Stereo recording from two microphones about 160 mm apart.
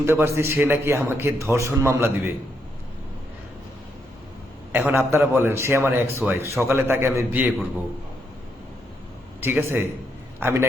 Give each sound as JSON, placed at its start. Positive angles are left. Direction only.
{"t": 0.0, "sound": "a man's voice", "side_deg": -15}
{"t": 4.7, "sound": "a man's voice", "side_deg": -10}
{"t": 9.4, "sound": "a man's voice", "side_deg": -15}